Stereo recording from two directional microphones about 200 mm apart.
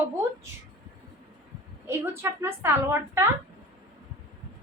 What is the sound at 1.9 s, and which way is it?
A woman's voice, 10° right (ahead or behind).